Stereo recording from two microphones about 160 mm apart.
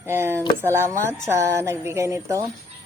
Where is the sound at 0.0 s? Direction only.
15° right (ahead or behind).